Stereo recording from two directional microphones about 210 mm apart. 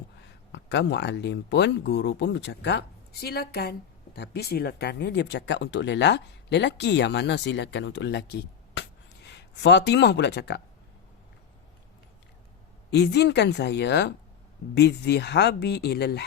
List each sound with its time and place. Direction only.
0.2 s speech: 55° left (ahead or behind)
12.9 s speech: 55° left (ahead or behind)